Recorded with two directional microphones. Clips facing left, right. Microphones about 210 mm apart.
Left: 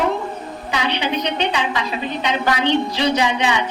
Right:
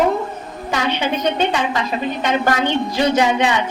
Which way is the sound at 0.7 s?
45° right (ahead or behind).